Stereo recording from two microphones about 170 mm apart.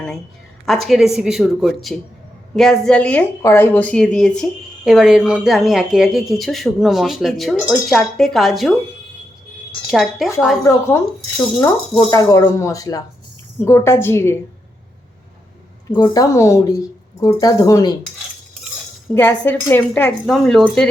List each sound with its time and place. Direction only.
0.6 s a woman's voice: centre (ahead or behind)
9.8 s speech: centre (ahead or behind)
10.6 s a woman's voice: 15° left (ahead or behind)
15.9 s speech: 25° left (ahead or behind)
19.1 s a woman's voice: 10° left (ahead or behind)